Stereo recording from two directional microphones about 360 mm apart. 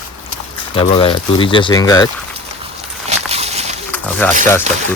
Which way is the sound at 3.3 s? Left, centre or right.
Centre.